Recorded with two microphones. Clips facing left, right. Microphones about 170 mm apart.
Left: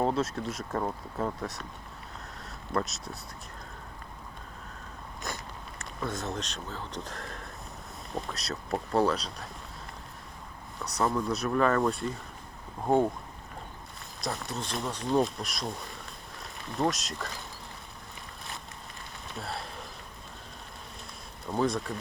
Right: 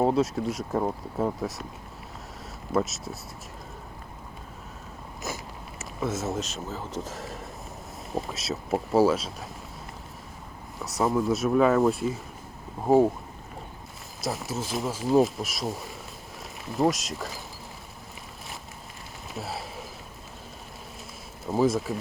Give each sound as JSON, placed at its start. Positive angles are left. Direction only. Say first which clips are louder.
{"t": 0.0, "sound": "speech", "louder": "right 5 dB", "side_deg": 0}
{"t": 0.8, "sound": "speech", "louder": "right 4 dB", "side_deg": -20}
{"t": 1.4, "sound": "speech", "louder": "right 5 dB", "side_deg": 0}
{"t": 2.7, "sound": "speech", "louder": "right 5 dB", "side_deg": 0}
{"t": 5.2, "sound": "biting", "louder": "right 4 dB", "side_deg": -5}
{"t": 5.8, "sound": "speech", "louder": "right 5 dB", "side_deg": -5}
{"t": 10.8, "sound": "speech", "louder": "right 4 dB", "side_deg": 0}
{"t": 14.2, "sound": "speech", "louder": "right 4 dB", "side_deg": 0}
{"t": 19.3, "sound": "speech", "louder": "right 3 dB", "side_deg": -5}
{"t": 21.4, "sound": "speech", "louder": "right 5 dB", "side_deg": -5}